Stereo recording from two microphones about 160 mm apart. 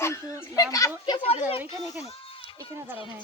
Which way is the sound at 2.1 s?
35° left (ahead or behind).